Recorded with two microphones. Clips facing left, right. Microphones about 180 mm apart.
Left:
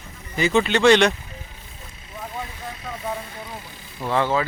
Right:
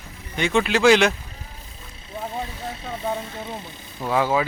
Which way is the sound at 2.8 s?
30° right (ahead or behind).